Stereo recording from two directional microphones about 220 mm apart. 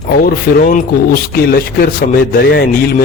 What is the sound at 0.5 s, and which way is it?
A man's voice, 40° left (ahead or behind).